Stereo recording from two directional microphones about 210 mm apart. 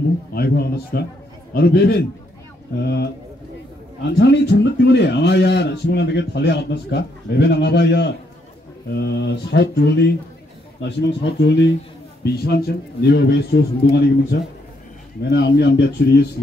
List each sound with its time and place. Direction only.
0.3 s a man's voice: 50° left (ahead or behind)
4.1 s a man's voice: 55° left (ahead or behind)